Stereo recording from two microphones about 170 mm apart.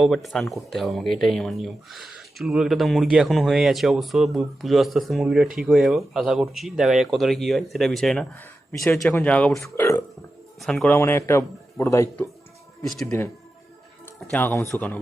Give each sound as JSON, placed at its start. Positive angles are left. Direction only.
{"t": 0.0, "sound": "speech", "side_deg": 0}
{"t": 9.7, "sound": "a man's voice", "side_deg": 15}
{"t": 10.6, "sound": "a man's voice", "side_deg": 5}